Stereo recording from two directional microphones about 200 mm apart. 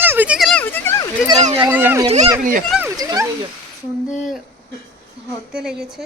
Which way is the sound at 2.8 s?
15° right (ahead or behind).